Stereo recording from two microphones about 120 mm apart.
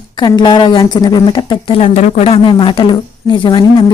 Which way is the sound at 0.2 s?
40° left (ahead or behind).